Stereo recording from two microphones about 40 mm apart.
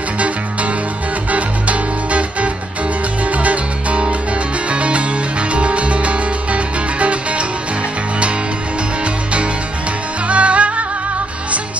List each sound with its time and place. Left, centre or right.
1.3 s music: right
10.2 s music: right